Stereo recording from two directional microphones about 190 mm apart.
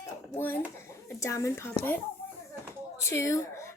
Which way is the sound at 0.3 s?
10° left (ahead or behind).